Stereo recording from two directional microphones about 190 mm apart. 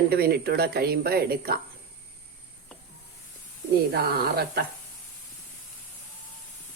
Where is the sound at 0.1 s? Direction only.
55° right (ahead or behind).